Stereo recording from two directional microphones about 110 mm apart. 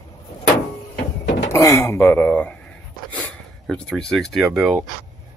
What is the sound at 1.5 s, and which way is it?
Speech, 30° left (ahead or behind).